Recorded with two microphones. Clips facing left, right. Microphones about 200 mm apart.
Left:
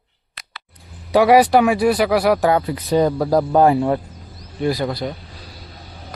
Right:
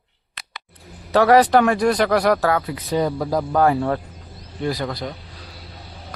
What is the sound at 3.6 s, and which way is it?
Speech, 20° left (ahead or behind).